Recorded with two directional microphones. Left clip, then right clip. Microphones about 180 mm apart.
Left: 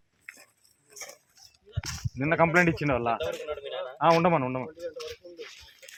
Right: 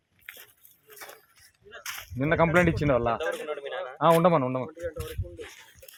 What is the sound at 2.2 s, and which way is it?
A man's voice, 60° right (ahead or behind).